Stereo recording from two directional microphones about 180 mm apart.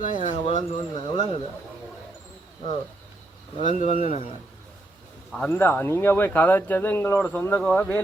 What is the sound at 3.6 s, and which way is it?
Speech, 40° left (ahead or behind).